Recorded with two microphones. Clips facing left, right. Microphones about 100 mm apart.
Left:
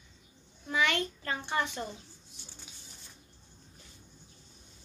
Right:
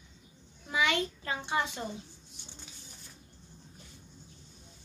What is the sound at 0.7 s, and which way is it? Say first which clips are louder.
A child's voice: even; 15° right (ahead or behind).